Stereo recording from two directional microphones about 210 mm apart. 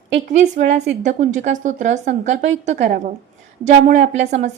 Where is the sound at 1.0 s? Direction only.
35° right (ahead or behind).